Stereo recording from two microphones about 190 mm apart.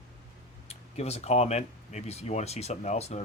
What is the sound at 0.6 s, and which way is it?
Speech, 35° left (ahead or behind).